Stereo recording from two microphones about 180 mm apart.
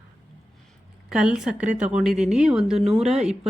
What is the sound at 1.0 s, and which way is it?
A woman's voice, 5° right (ahead or behind).